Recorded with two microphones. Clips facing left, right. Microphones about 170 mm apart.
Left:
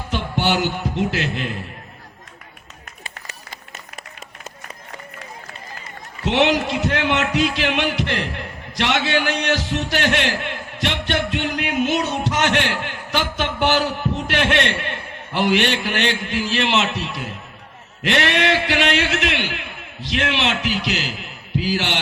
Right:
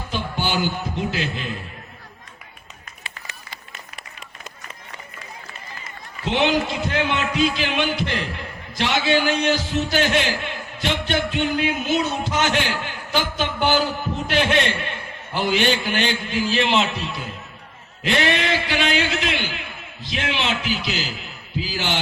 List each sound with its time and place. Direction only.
0.1 s a man's voice: 70° left (ahead or behind)
3.0 s run: 45° left (ahead or behind)
6.2 s speech: 70° left (ahead or behind)